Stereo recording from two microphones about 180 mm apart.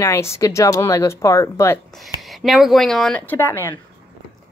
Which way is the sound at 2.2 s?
Centre (ahead or behind).